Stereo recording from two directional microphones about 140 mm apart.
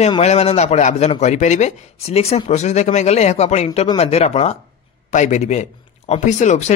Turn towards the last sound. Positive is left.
turn(degrees=60)  # may be behind; listen again after turning